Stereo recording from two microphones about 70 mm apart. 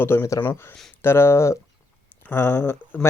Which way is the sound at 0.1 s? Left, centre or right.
Left.